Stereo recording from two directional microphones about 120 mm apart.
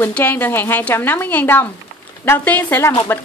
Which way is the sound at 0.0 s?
15° left (ahead or behind).